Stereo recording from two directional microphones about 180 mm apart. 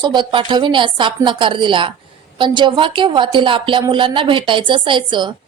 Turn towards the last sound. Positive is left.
turn(degrees=-25)  # may be behind; listen again after turning